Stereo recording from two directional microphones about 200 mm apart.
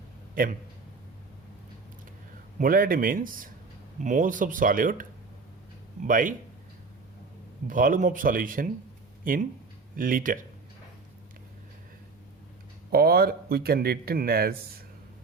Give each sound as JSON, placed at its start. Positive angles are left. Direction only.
{"t": 0.4, "sound": "speech", "side_deg": -45}
{"t": 2.6, "sound": "speech", "side_deg": -45}
{"t": 6.1, "sound": "speech", "side_deg": -40}
{"t": 7.7, "sound": "speech", "side_deg": -40}
{"t": 12.9, "sound": "speech", "side_deg": -50}